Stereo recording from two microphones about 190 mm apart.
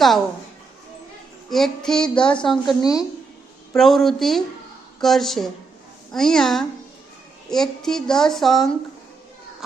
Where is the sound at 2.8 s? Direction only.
20° left (ahead or behind).